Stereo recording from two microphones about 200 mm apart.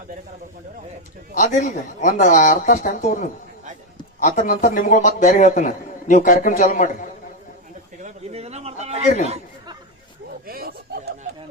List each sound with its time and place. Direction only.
1.4 s a man's voice: 35° left (ahead or behind)
8.0 s a sound: 30° right (ahead or behind)
10.4 s snicker: 50° right (ahead or behind)